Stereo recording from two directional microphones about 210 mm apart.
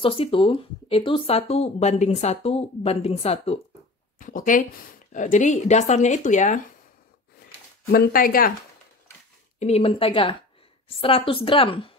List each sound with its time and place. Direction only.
0.0 s speech: 25° left (ahead or behind)
4.2 s speech: 40° left (ahead or behind)
7.9 s speech: 45° left (ahead or behind)
9.6 s speech: 30° left (ahead or behind)